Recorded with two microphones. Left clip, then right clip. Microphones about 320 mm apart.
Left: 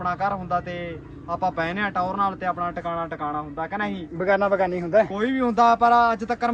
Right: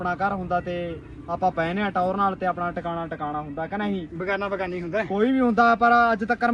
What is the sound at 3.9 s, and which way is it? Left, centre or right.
A man's voice, left.